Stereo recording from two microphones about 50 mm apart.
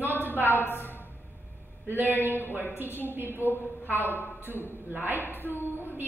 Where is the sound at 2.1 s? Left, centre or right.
Right.